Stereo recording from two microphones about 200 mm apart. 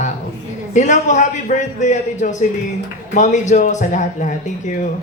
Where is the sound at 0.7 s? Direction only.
35° left (ahead or behind).